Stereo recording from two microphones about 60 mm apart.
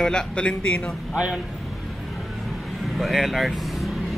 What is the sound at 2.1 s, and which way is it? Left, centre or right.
Vehicle, centre.